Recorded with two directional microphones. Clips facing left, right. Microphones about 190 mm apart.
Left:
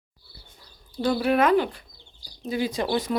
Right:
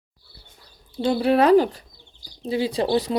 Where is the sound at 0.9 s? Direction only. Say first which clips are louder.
Right 3 dB; 25° right (ahead or behind).